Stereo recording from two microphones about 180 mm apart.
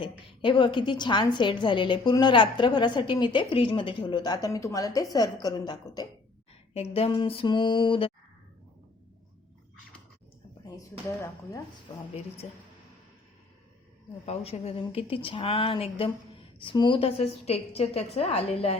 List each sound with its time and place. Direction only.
0.0 s a woman's voice: 25° left (ahead or behind)
11.9 s a woman's voice: 25° left (ahead or behind)
12.4 s speech: 40° left (ahead or behind)
14.3 s speech: 35° left (ahead or behind)